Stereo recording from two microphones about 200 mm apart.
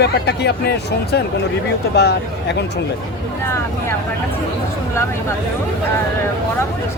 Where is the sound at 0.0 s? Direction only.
55° left (ahead or behind).